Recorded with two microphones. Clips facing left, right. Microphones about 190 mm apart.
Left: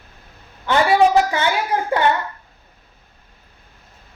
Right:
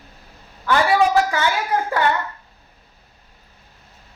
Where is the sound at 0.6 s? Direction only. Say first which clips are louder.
Left 2 dB; 25° left (ahead or behind).